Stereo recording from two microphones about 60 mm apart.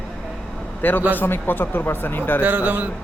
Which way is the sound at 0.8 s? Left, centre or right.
Left.